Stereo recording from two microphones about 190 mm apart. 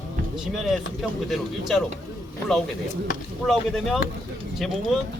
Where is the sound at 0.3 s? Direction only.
Centre (ahead or behind).